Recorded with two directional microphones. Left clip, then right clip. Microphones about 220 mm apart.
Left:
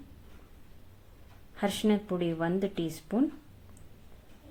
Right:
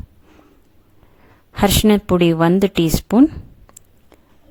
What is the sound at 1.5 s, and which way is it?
Speech, 50° right (ahead or behind).